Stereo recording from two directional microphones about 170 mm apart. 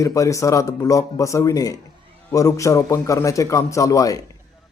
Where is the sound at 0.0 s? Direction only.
20° left (ahead or behind).